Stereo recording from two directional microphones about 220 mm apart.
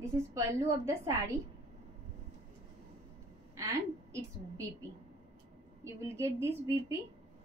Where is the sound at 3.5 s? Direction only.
15° right (ahead or behind).